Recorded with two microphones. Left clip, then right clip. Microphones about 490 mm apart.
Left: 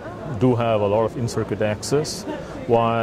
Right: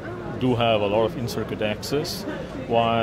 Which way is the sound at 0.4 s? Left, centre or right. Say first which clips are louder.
Left 2 dB; left.